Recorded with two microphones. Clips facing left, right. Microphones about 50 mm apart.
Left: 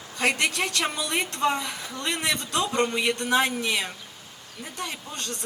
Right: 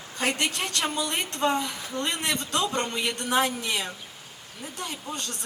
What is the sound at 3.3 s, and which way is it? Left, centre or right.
Speech, left.